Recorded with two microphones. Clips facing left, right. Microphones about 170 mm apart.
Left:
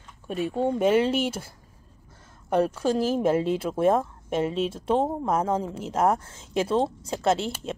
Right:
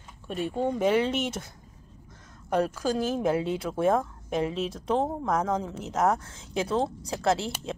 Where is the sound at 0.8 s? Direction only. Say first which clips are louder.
Left 3 dB; 30° left (ahead or behind).